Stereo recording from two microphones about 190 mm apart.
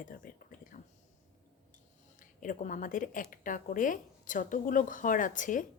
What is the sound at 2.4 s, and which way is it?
A woman's voice, 45° left (ahead or behind).